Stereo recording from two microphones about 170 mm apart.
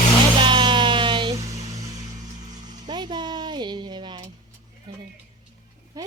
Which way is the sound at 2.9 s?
25° right (ahead or behind).